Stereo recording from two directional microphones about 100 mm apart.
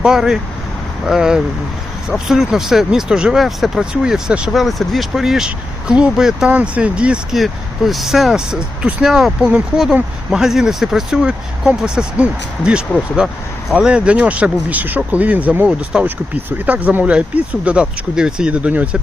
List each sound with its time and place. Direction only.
0.0 s speech: 5° right (ahead or behind)